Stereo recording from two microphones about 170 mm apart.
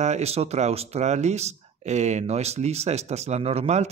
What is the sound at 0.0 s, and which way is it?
Speech, 40° right (ahead or behind).